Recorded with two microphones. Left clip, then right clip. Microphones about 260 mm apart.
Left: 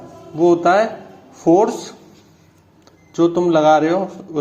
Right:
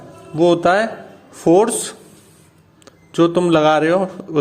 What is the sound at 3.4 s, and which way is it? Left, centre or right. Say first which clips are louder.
Speech: left 3 dB; right.